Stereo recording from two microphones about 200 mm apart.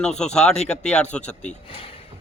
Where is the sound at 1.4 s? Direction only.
30° left (ahead or behind).